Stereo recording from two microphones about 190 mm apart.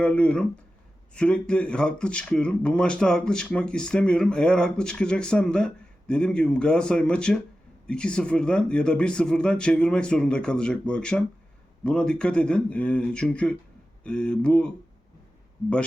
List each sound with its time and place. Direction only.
0.0 s speech: 5° left (ahead or behind)